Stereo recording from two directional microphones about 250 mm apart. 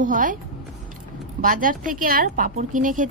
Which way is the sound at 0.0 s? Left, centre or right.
Right.